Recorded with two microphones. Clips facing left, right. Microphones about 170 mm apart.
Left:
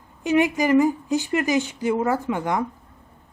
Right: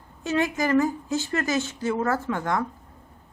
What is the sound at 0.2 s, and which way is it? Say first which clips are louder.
A woman's voice: left 5 dB; 15° left (ahead or behind).